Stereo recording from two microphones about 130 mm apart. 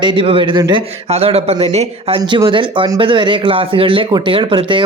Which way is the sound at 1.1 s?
50° right (ahead or behind).